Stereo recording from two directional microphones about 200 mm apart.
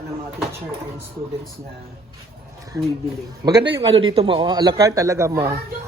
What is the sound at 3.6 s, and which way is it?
A man's voice, 25° right (ahead or behind).